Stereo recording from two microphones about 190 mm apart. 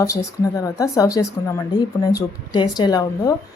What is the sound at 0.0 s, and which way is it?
A woman's voice, 15° left (ahead or behind).